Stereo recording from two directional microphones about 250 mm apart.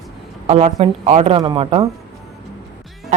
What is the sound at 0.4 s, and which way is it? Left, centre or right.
A woman's voice, right.